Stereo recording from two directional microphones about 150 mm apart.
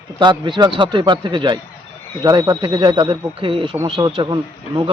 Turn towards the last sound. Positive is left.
turn(degrees=-30)  # may be behind; listen again after turning